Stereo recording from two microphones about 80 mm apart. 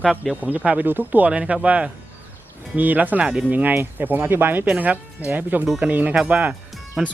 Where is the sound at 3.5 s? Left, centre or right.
Right.